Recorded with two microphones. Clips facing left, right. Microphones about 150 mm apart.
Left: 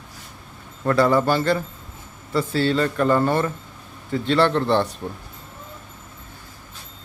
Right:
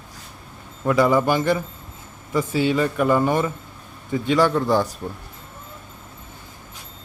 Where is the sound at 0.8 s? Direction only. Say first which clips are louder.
Even; 10° right (ahead or behind).